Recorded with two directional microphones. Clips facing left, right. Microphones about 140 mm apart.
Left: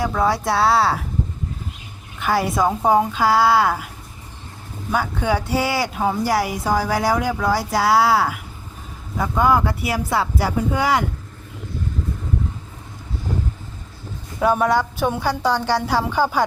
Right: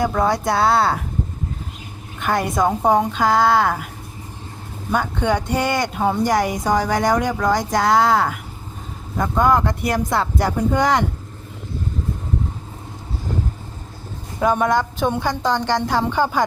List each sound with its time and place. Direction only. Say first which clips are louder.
0.0 s speech: right 1 dB; centre (ahead or behind)
2.1 s speech: even; 5° left (ahead or behind)
4.9 s a woman's voice: right 1 dB; 5° left (ahead or behind)
14.3 s a woman's voice: even; 5° left (ahead or behind)